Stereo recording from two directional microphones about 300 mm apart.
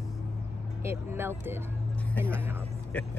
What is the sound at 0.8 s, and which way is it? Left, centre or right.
Speech, centre.